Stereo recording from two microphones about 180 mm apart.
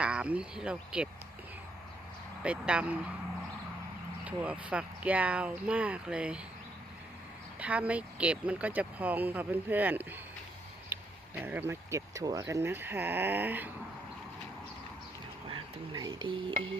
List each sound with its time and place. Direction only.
0.0 s speech: 5° right (ahead or behind)
2.4 s speech: 5° right (ahead or behind)
4.2 s speech: 5° right (ahead or behind)
7.6 s speech: 10° right (ahead or behind)
10.9 s a sound: 10° right (ahead or behind)
11.3 s speech: 10° right (ahead or behind)
15.4 s speech: 25° right (ahead or behind)